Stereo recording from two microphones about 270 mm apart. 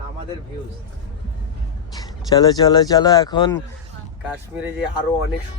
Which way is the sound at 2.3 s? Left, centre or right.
Centre.